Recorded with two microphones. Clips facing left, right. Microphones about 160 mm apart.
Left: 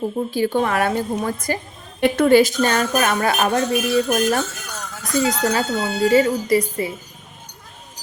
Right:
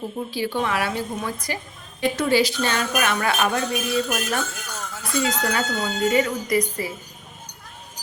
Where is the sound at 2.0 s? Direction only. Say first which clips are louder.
Left 6 dB; 55° left (ahead or behind); by 4.4 s 35° left (ahead or behind).